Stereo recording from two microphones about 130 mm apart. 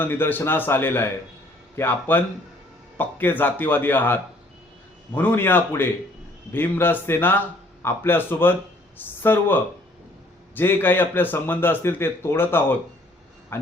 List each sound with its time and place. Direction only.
0.0 s a man's voice: 15° left (ahead or behind)